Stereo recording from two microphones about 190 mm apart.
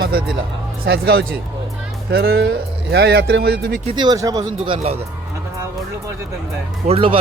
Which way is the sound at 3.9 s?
20° right (ahead or behind).